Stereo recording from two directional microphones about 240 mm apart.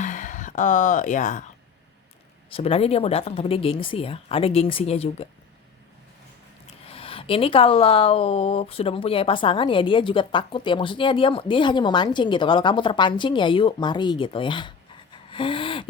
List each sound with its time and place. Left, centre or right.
0.0 s speech: left
2.5 s speech: left
6.8 s speech: left
15.1 s gasp: left